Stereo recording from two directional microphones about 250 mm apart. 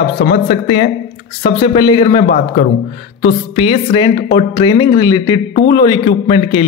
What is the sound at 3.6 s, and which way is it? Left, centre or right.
Speech, left.